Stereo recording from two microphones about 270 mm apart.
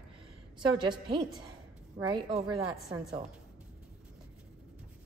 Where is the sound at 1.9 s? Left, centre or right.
Centre.